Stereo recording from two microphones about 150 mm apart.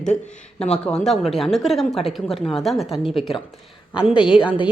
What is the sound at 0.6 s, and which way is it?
A woman's voice, 5° left (ahead or behind).